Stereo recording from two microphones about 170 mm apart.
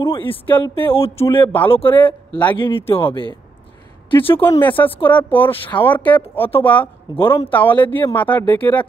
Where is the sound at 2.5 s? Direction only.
30° left (ahead or behind).